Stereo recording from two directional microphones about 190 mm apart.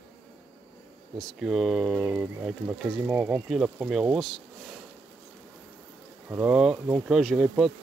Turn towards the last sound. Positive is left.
turn(degrees=0)  # may be behind; listen again after turning